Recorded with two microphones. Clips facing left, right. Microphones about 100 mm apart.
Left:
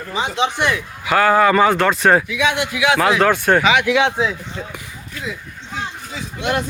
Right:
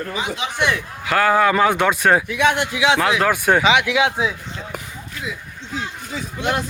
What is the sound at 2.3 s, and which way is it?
Speech, 50° right (ahead or behind).